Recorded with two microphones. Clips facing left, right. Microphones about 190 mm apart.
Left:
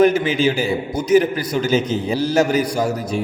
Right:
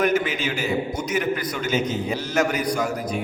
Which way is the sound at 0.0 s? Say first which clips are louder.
Left 7 dB; 30° left (ahead or behind).